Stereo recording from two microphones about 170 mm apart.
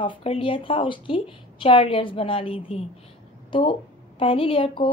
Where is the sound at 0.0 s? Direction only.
30° left (ahead or behind).